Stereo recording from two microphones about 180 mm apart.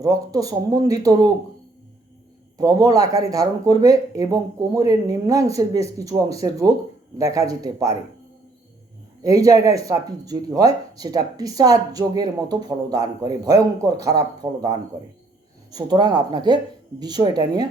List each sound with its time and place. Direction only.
0.0 s speech: 20° right (ahead or behind)
2.6 s speech: 20° right (ahead or behind)
9.2 s speech: 20° right (ahead or behind)